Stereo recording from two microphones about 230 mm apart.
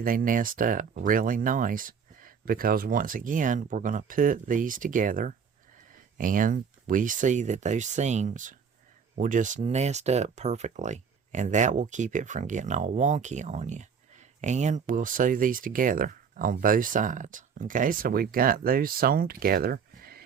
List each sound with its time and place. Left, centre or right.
0.0 s speech: right